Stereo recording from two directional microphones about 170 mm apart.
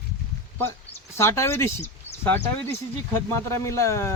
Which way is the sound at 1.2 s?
15° left (ahead or behind).